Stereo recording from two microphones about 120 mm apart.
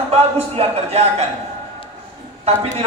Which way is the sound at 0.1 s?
55° right (ahead or behind).